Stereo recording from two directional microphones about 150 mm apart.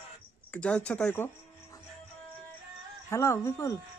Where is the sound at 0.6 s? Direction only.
10° left (ahead or behind).